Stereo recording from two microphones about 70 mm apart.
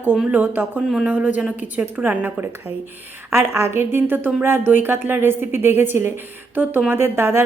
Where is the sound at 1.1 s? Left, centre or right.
Right.